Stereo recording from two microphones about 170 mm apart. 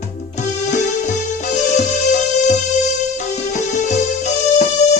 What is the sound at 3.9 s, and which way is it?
Music, 45° left (ahead or behind).